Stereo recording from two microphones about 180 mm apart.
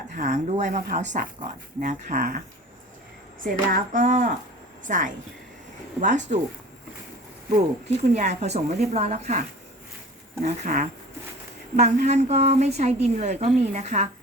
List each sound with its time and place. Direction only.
0.1 s speech: 45° right (ahead or behind)
3.4 s speech: 50° right (ahead or behind)
7.5 s speech: 40° right (ahead or behind)